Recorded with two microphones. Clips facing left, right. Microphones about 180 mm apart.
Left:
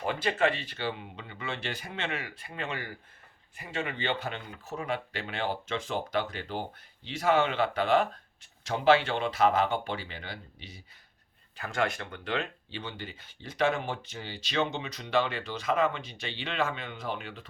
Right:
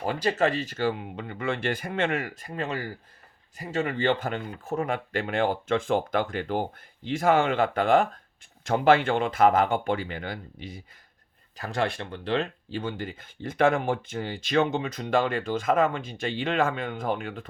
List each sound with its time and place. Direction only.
0.0 s speech: 35° right (ahead or behind)
11.5 s speech: 35° right (ahead or behind)